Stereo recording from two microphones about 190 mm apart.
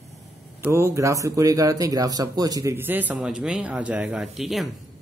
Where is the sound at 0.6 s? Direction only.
15° right (ahead or behind).